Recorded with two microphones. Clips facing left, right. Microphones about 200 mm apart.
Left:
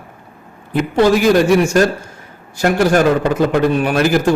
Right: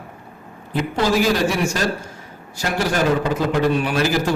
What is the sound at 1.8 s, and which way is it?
A man's voice, 55° left (ahead or behind).